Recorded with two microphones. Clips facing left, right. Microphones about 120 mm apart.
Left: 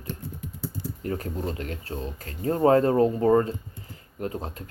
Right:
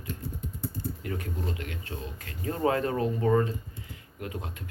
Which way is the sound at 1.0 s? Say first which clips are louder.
Left 8 dB; 35° left (ahead or behind).